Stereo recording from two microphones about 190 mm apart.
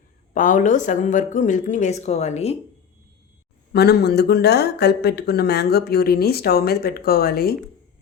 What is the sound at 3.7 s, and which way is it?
Speech, 60° left (ahead or behind).